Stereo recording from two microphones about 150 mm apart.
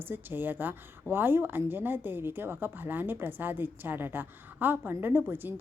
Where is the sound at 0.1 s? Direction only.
15° right (ahead or behind).